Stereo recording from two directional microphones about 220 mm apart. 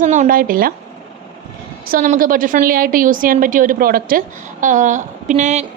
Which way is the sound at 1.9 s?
40° right (ahead or behind).